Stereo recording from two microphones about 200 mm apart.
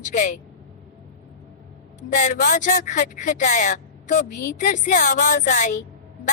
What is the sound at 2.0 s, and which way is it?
A woman's voice, 40° left (ahead or behind).